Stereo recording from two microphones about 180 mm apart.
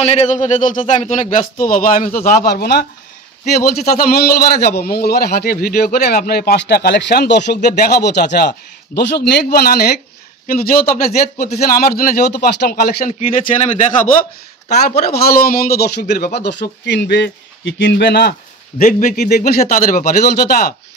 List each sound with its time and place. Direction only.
0.0 s speech: 40° left (ahead or behind)
2.1 s a man's voice: 60° left (ahead or behind)
11.0 s speech: 40° left (ahead or behind)
11.8 s a man's voice: 55° left (ahead or behind)
13.2 s speech: 40° left (ahead or behind)
14.9 s a man's voice: 55° left (ahead or behind)
16.3 s speech: 70° left (ahead or behind)
18.8 s a man's voice: 50° left (ahead or behind)
19.6 s speech: 50° left (ahead or behind)